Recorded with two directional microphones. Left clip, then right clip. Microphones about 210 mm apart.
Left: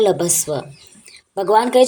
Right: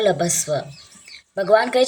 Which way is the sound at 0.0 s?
15° left (ahead or behind).